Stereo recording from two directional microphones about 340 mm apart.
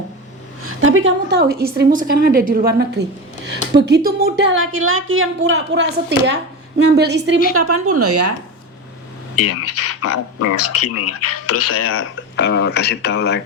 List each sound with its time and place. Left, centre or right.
0.6 s a woman's voice: right
7.5 s speech: right
9.4 s speech: left